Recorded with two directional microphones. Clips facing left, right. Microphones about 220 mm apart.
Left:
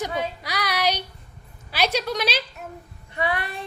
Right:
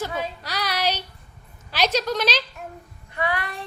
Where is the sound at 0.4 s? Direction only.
15° left (ahead or behind).